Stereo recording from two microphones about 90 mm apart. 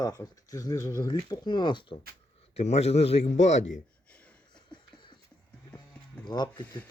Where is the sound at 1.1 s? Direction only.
60° left (ahead or behind).